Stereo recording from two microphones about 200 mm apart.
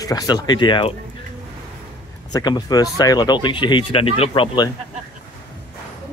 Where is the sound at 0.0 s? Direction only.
20° left (ahead or behind).